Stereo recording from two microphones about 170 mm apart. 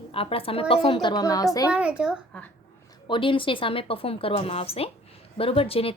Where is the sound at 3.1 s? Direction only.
30° left (ahead or behind).